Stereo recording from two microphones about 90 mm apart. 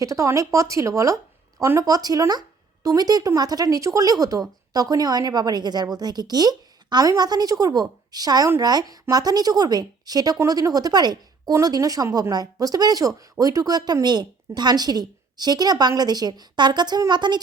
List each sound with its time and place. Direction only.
0.0 s speech: 35° right (ahead or behind)
1.8 s a woman's voice: 45° right (ahead or behind)